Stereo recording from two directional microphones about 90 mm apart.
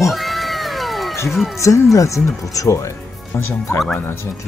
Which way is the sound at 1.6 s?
35° left (ahead or behind).